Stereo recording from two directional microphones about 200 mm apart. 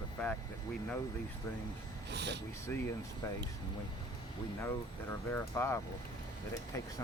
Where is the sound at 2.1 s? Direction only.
60° right (ahead or behind).